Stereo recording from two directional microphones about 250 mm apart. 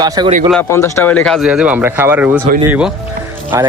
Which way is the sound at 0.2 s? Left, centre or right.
Centre.